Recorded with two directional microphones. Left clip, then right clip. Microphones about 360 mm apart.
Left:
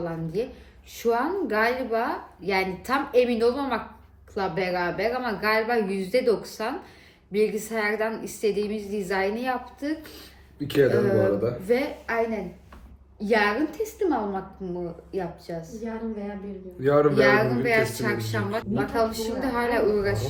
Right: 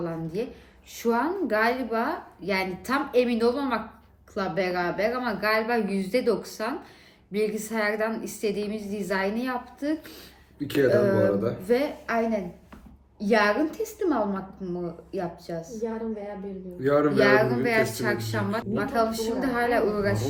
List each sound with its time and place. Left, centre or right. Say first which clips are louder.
0.0 s a woman's voice: left 2 dB; centre
15.8 s a woman's voice: right 4 dB; right
16.8 s a woman's voice: left 2 dB; centre